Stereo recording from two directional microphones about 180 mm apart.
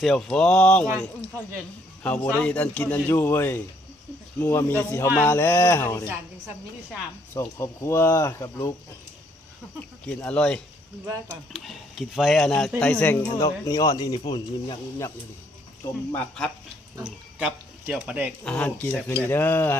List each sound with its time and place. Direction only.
0.0 s speech: centre (ahead or behind)
2.0 s speech: 5° left (ahead or behind)
7.3 s speech: 15° left (ahead or behind)
10.1 s speech: 5° left (ahead or behind)
11.0 s speech: 10° right (ahead or behind)
11.6 s speech: centre (ahead or behind); by 14.8 s 25° left (ahead or behind)
16.1 s speech: 5° left (ahead or behind)
17.0 s speech: 5° right (ahead or behind)
18.4 s speech: 5° left (ahead or behind)